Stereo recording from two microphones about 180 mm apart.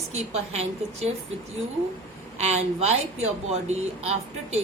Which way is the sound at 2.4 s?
35° right (ahead or behind).